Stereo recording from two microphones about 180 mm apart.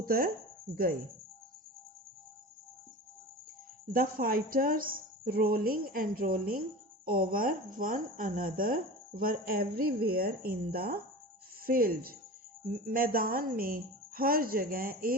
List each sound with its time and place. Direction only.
0.0 s chopping: 55° right (ahead or behind)
3.9 s speech: 55° right (ahead or behind)